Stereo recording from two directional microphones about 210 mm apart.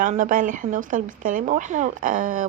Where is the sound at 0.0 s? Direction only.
40° right (ahead or behind).